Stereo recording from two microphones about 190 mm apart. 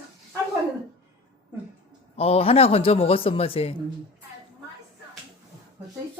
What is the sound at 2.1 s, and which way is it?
Speech, 30° left (ahead or behind).